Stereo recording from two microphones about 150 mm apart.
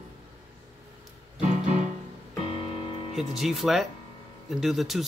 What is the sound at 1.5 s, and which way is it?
Music, 50° right (ahead or behind).